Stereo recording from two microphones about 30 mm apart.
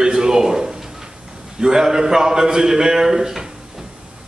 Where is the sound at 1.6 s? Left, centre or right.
Right.